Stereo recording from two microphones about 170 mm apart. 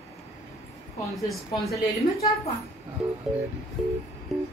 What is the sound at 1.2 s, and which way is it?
Speech, centre (ahead or behind).